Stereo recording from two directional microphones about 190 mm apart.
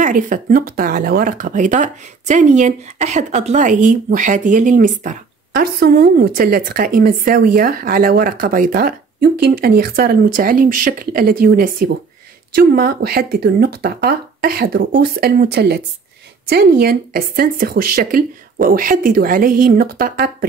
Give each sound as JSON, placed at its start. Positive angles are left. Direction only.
{"t": 0.0, "sound": "speech", "side_deg": -45}